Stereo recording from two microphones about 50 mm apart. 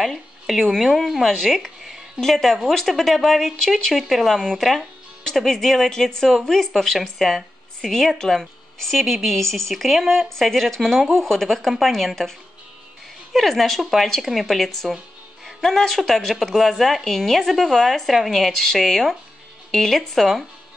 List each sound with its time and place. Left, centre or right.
0.5 s a woman's voice: centre